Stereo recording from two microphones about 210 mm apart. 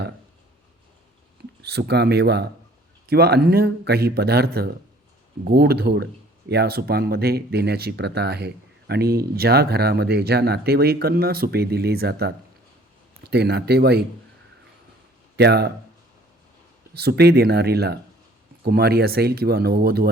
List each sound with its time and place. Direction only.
1.7 s speech: 50° right (ahead or behind)
15.4 s speech: 50° right (ahead or behind)
16.9 s speech: 50° right (ahead or behind)